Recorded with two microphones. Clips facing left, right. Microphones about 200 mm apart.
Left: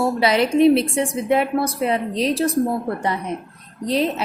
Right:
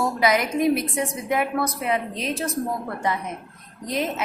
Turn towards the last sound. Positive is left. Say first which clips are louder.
# left 6 dB
turn(degrees=30)  # may be behind; listen again after turning